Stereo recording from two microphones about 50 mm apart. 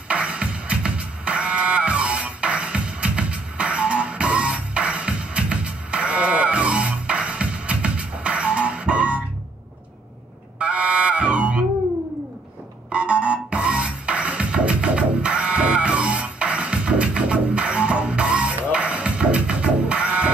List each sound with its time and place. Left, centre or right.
0.1 s music: right
10.6 s music: right
12.9 s music: right